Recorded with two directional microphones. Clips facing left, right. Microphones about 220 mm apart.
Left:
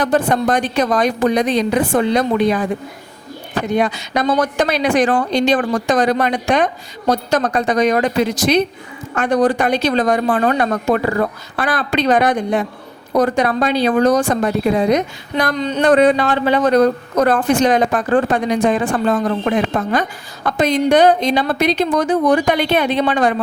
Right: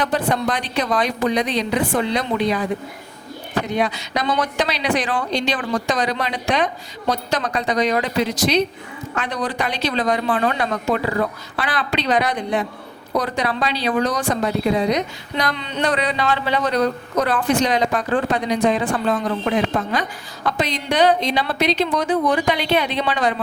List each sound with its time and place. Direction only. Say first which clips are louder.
0.0 s a woman's voice: left 5 dB; 45° left (ahead or behind)
3.7 s a woman's voice: left 6 dB; 50° left (ahead or behind)